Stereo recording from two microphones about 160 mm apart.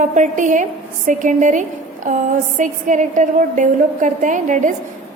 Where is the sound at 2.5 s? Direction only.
55° right (ahead or behind).